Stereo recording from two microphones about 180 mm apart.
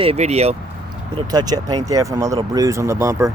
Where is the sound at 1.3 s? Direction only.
20° right (ahead or behind).